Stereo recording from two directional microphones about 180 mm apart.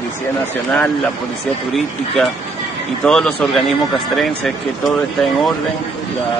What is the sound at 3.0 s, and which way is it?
Speech, 5° left (ahead or behind).